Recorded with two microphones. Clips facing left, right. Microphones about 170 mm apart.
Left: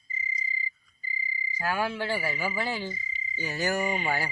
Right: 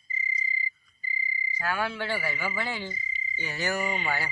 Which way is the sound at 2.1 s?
40° left (ahead or behind).